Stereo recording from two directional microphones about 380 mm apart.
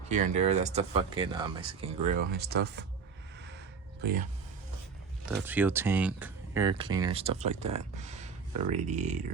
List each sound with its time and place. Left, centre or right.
0.1 s speech: centre
4.0 s speech: right
5.2 s speech: centre